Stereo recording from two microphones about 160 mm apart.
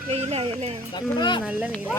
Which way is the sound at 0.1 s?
40° right (ahead or behind).